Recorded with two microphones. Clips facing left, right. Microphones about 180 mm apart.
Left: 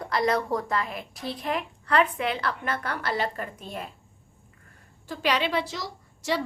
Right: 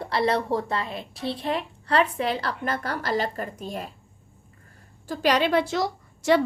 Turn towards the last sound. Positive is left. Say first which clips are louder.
# right 8 dB
turn(degrees=-55)  # may be behind; listen again after turning